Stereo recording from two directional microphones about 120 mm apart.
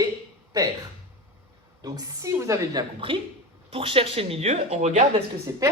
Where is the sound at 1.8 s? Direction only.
30° right (ahead or behind).